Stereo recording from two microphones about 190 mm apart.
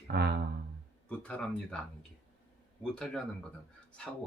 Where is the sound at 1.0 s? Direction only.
5° left (ahead or behind).